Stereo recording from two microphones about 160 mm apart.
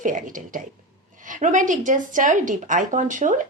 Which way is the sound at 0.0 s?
55° right (ahead or behind).